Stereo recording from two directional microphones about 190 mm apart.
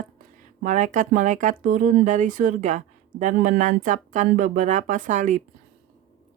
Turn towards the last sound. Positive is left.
turn(degrees=-40)  # may be behind; listen again after turning